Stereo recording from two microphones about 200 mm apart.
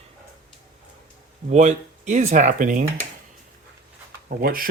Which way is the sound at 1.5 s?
35° right (ahead or behind).